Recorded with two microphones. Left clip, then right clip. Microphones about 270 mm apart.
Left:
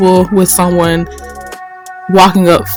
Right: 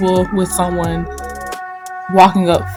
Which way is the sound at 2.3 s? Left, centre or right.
Left.